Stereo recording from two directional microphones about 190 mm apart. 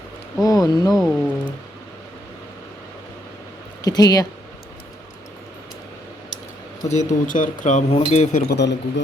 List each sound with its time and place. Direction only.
0.4 s speech: 20° left (ahead or behind)
0.9 s speech: centre (ahead or behind)
3.8 s speech: 20° left (ahead or behind)
6.8 s speech: 35° left (ahead or behind)
8.5 s a man's voice: 65° left (ahead or behind)